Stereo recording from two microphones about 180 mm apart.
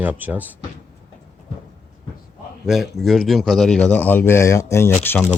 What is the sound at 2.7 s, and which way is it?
Speech, centre (ahead or behind).